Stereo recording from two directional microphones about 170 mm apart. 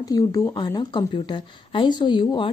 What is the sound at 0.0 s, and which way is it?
Speech, 20° left (ahead or behind).